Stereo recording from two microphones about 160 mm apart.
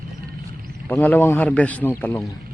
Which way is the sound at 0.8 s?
10° left (ahead or behind).